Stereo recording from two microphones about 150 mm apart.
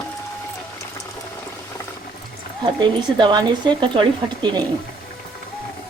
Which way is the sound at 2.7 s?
30° right (ahead or behind).